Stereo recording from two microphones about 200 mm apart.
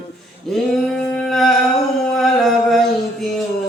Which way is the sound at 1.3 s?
Centre (ahead or behind).